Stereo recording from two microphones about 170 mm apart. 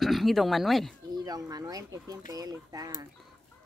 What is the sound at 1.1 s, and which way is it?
Speech, 20° right (ahead or behind).